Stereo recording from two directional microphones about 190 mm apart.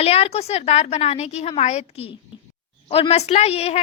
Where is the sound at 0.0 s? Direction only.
30° left (ahead or behind).